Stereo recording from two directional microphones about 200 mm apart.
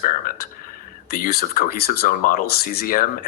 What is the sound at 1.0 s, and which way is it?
Speech, 50° left (ahead or behind).